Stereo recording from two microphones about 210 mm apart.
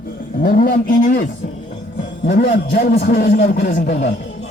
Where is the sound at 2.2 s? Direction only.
50° left (ahead or behind).